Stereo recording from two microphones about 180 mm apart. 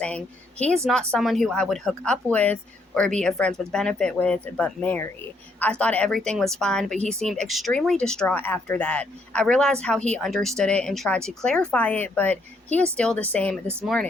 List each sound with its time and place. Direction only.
1.1 s speech: centre (ahead or behind)